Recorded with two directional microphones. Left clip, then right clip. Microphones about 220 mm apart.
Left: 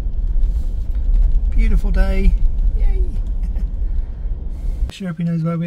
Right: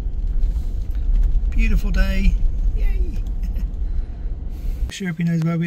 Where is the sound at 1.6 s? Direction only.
20° left (ahead or behind).